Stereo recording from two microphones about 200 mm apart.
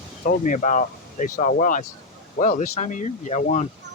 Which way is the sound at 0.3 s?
40° left (ahead or behind).